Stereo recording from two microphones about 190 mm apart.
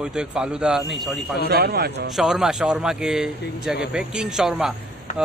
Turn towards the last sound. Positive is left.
turn(degrees=-5)  # may be behind; listen again after turning